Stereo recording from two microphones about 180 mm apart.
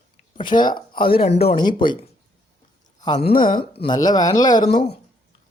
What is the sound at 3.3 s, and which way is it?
Speech, 50° left (ahead or behind).